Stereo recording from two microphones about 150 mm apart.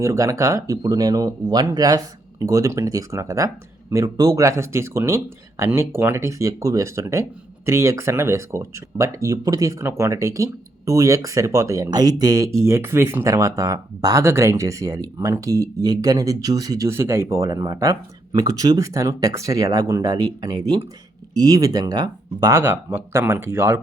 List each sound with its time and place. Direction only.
0.0 s speech: 20° right (ahead or behind)